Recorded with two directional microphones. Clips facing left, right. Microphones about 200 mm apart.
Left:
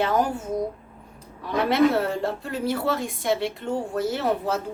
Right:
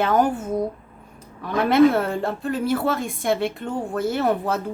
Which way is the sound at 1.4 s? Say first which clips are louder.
Right 4 dB; 55° right (ahead or behind).